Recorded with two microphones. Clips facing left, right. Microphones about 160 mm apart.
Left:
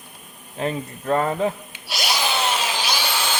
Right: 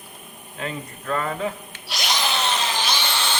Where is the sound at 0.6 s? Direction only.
30° left (ahead or behind).